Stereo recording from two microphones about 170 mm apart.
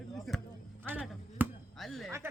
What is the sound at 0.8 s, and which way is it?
Chop, 10° right (ahead or behind).